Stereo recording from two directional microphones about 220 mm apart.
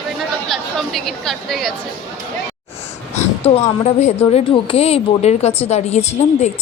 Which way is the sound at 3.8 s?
30° left (ahead or behind).